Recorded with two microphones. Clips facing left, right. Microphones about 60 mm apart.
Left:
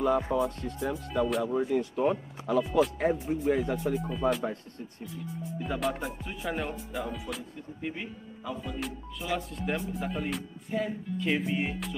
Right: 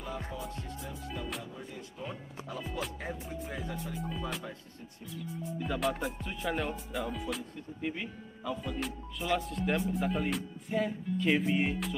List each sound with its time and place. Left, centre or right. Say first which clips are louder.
0.3 s speech: left 11 dB; left
5.6 s music: left 1 dB; centre